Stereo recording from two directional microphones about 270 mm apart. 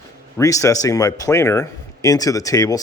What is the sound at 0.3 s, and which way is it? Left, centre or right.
Speech, centre.